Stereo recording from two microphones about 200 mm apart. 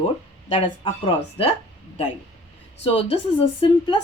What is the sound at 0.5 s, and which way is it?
Speech, 25° left (ahead or behind).